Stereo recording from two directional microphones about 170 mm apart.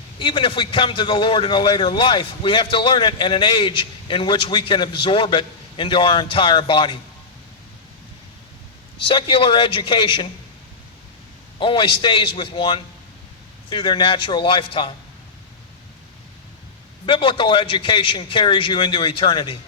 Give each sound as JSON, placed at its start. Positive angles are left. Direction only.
{"t": 0.2, "sound": "a man's voice", "side_deg": 30}
{"t": 9.0, "sound": "a man's voice", "side_deg": 30}
{"t": 11.6, "sound": "a man's voice", "side_deg": 30}
{"t": 17.1, "sound": "a man's voice", "side_deg": 30}